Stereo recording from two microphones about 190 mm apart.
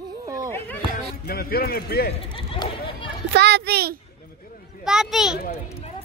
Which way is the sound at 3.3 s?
60° right (ahead or behind).